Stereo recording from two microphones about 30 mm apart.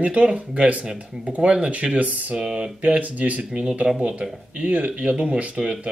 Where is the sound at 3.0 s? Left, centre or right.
Right.